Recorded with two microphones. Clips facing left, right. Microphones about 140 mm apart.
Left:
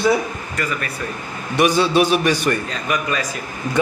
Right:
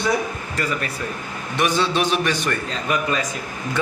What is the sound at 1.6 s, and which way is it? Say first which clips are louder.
Speech: left 5 dB; 10° left (ahead or behind).